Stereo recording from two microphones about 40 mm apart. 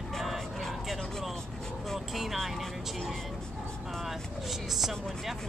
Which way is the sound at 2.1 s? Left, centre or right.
Centre.